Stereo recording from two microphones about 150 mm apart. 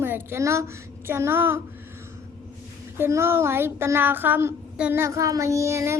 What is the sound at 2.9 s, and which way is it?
Speech, 15° right (ahead or behind).